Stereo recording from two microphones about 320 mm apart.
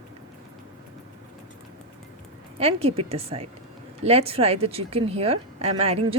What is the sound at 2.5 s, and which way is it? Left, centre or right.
A woman's voice, centre.